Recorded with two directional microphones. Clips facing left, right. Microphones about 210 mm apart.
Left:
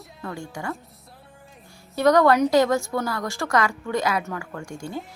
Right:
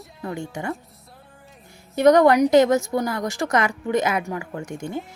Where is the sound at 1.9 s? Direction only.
20° right (ahead or behind).